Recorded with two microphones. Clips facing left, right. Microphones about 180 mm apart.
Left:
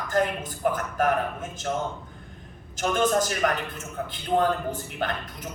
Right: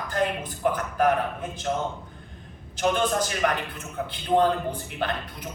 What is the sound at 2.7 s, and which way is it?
A man's voice, 45° left (ahead or behind).